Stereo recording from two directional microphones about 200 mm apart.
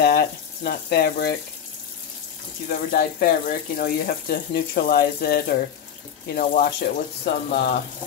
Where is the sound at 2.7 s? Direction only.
45° left (ahead or behind).